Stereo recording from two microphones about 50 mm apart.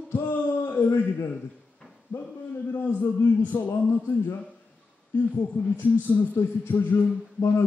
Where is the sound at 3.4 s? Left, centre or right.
Left.